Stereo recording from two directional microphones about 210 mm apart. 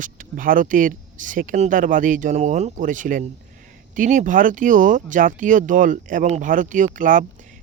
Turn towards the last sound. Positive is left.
turn(degrees=-40)  # may be behind; listen again after turning